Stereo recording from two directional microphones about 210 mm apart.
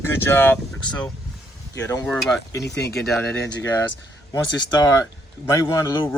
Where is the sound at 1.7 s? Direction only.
15° left (ahead or behind).